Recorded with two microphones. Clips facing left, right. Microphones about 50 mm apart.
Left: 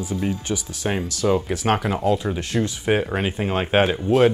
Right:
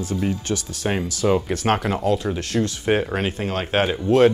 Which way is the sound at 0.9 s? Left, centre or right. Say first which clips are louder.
Right 1 dB; centre.